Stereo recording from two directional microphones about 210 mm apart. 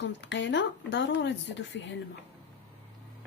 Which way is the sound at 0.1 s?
55° left (ahead or behind).